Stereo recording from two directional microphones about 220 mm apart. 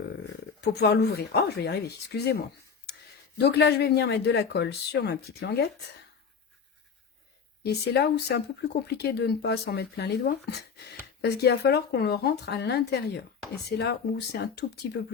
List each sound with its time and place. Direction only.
0.6 s speech: 50° left (ahead or behind)
7.6 s speech: 50° left (ahead or behind)